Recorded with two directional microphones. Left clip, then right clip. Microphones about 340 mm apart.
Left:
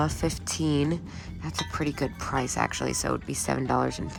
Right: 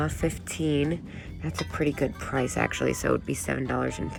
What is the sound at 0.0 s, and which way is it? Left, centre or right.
Speech, centre.